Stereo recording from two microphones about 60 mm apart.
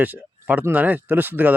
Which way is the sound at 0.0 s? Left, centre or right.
Right.